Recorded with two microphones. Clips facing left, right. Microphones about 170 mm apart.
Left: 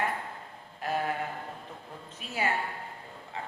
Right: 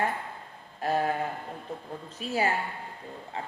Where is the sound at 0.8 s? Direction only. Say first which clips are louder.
Right 4 dB; 35° right (ahead or behind).